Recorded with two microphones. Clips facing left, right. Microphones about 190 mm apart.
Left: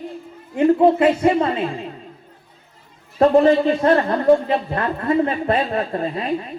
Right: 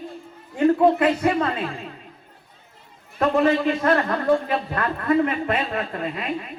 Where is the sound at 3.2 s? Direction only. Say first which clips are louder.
Left 6 dB; 30° left (ahead or behind).